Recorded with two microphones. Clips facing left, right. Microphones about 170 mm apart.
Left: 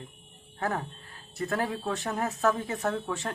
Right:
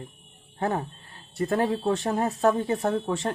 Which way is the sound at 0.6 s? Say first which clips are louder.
Right 4 dB; 25° right (ahead or behind).